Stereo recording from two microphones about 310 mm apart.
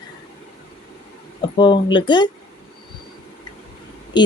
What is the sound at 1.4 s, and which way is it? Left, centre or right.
Speech, centre.